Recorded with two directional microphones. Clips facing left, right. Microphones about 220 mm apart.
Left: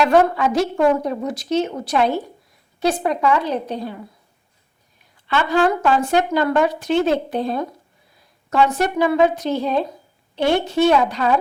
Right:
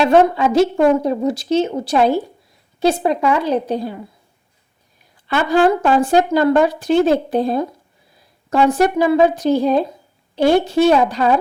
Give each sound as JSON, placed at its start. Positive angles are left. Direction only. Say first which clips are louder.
{"t": 0.0, "sound": "a woman's voice", "louder": "right 3 dB", "side_deg": -25}
{"t": 5.3, "sound": "speech", "louder": "right 3 dB", "side_deg": -40}